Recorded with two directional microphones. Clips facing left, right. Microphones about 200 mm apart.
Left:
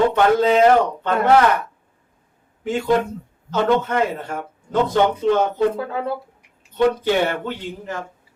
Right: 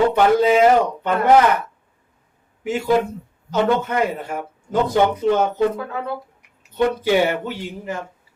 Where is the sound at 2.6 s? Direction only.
10° right (ahead or behind).